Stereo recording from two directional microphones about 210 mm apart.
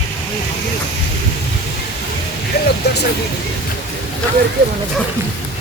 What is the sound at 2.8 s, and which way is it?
Speech, 50° left (ahead or behind).